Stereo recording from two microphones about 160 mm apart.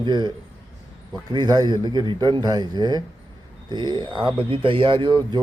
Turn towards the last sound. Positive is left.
turn(degrees=-30)  # may be behind; listen again after turning